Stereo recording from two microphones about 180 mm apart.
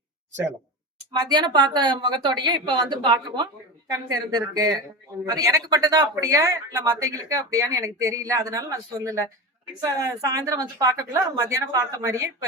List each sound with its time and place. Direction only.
1.3 s speech: 25° right (ahead or behind)